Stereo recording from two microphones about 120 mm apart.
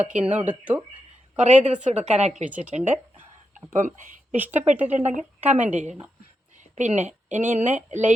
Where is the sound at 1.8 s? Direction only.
65° right (ahead or behind).